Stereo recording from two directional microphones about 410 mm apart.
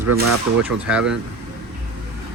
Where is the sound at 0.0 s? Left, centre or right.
Right.